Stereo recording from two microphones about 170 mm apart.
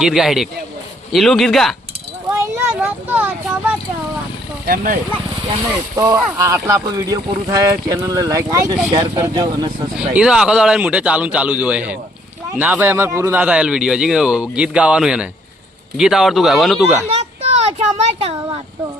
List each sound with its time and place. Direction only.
0.0 s speech: centre (ahead or behind)
2.4 s a sound: 15° right (ahead or behind)
4.6 s speech: 60° right (ahead or behind)
6.1 s speech: 10° right (ahead or behind)
10.2 s a man's voice: 5° right (ahead or behind)
17.4 s speech: 35° right (ahead or behind)